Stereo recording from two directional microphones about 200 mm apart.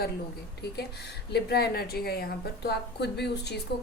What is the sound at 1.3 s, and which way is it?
A woman's voice, 55° left (ahead or behind).